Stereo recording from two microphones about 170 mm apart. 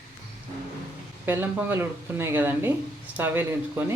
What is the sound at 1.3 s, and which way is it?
Speech, 15° right (ahead or behind).